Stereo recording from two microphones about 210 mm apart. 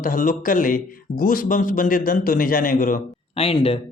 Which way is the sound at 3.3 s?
25° left (ahead or behind).